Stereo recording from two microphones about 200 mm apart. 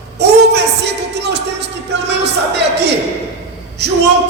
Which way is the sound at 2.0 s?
60° right (ahead or behind).